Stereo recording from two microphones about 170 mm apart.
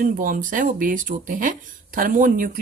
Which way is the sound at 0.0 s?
55° right (ahead or behind).